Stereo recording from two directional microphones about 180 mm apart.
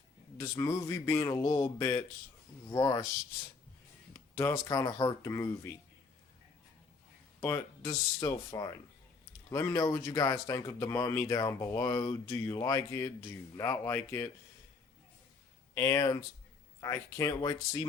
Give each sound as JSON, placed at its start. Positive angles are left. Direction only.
{"t": 0.3, "sound": "speech", "side_deg": 15}
{"t": 4.4, "sound": "speech", "side_deg": 15}
{"t": 7.4, "sound": "speech", "side_deg": 15}
{"t": 15.7, "sound": "speech", "side_deg": 15}